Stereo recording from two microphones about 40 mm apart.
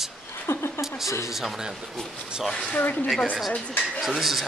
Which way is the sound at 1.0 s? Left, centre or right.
Centre.